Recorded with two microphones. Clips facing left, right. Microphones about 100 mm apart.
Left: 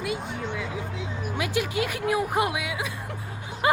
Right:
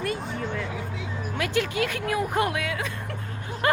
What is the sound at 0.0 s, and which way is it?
Music, 5° left (ahead or behind).